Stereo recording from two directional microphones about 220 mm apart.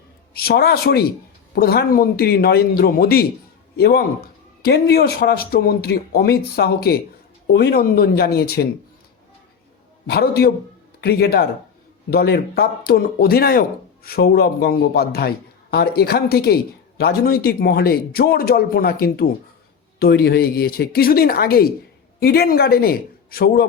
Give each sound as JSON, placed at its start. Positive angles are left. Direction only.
{"t": 0.3, "sound": "a man's voice", "side_deg": 45}
{"t": 10.1, "sound": "a man's voice", "side_deg": 45}